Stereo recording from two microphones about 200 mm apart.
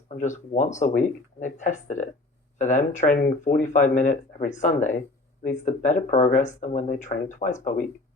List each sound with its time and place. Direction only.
0.1 s speech: 40° left (ahead or behind)